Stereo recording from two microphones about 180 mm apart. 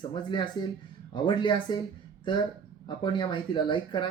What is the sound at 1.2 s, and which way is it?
Speech, 25° left (ahead or behind).